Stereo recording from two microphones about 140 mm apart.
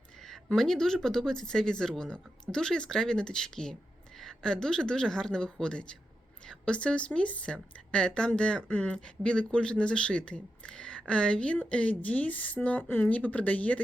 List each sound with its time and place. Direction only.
0.3 s a woman's voice: centre (ahead or behind)